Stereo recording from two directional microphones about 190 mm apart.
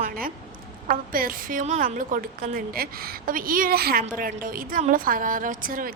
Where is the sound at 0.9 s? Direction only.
50° right (ahead or behind).